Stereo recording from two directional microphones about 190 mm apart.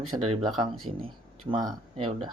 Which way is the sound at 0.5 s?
25° right (ahead or behind).